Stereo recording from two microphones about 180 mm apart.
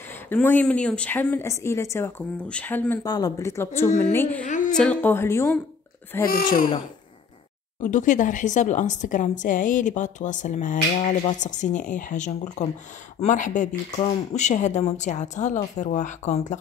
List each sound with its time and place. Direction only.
0.3 s speech: 10° left (ahead or behind)
4.4 s a woman's voice: 45° left (ahead or behind)
4.7 s speech: 10° left (ahead or behind)
6.2 s a woman's voice: 50° left (ahead or behind)
7.8 s a woman's voice: 45° left (ahead or behind)